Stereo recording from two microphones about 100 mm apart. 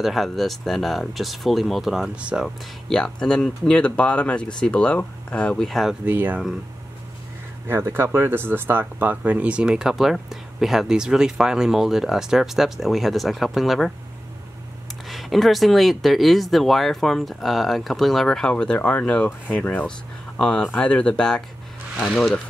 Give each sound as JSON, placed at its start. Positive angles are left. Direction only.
{"t": 0.0, "sound": "speech", "side_deg": 0}
{"t": 2.4, "sound": "speech", "side_deg": 5}
{"t": 6.0, "sound": "speech", "side_deg": -20}
{"t": 7.6, "sound": "speech", "side_deg": -25}
{"t": 15.0, "sound": "speech", "side_deg": 0}